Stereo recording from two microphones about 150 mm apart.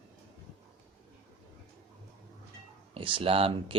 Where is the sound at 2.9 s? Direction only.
35° right (ahead or behind).